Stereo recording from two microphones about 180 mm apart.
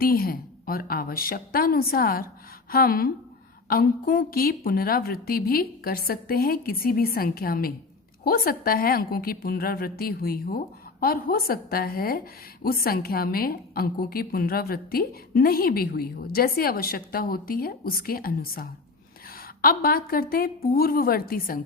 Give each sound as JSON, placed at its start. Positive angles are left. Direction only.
{"t": 0.0, "sound": "a woman's voice", "side_deg": 55}